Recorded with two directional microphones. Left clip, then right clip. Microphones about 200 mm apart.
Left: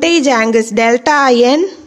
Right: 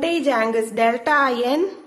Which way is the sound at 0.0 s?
45° left (ahead or behind).